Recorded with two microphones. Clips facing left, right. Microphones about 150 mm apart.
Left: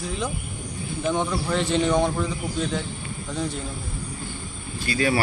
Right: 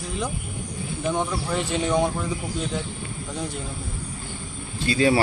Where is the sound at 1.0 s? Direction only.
5° right (ahead or behind).